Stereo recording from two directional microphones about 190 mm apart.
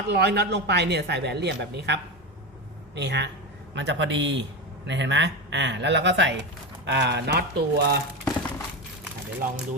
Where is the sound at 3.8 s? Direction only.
70° right (ahead or behind).